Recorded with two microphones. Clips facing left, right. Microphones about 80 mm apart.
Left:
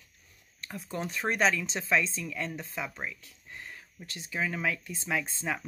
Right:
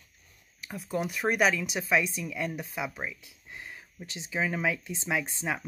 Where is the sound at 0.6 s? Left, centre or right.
Centre.